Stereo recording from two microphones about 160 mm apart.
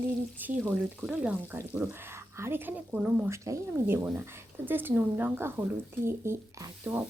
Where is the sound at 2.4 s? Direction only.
15° right (ahead or behind).